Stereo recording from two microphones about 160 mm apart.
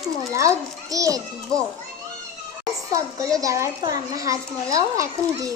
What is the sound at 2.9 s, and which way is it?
A child's voice, 20° right (ahead or behind).